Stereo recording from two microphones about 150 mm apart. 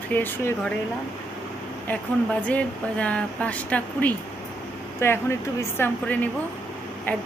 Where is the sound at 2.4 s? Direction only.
10° left (ahead or behind).